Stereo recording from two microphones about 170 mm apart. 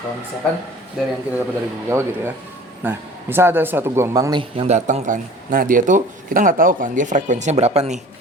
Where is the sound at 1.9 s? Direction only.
15° right (ahead or behind).